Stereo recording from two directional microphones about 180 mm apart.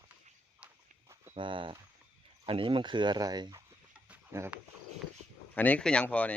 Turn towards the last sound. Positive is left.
turn(degrees=10)  # may be behind; listen again after turning